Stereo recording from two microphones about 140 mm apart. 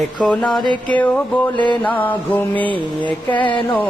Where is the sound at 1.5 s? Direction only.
35° left (ahead or behind).